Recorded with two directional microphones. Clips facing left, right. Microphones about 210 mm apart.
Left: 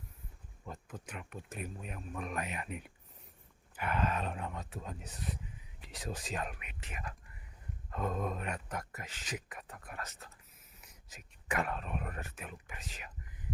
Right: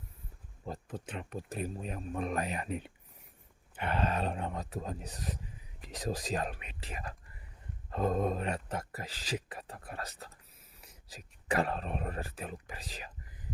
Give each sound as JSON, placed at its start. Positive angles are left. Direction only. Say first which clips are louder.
{"t": 0.6, "sound": "speech", "louder": "right 6 dB", "side_deg": -30}